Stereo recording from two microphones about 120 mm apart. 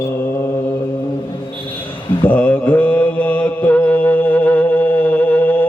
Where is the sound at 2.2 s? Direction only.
15° left (ahead or behind).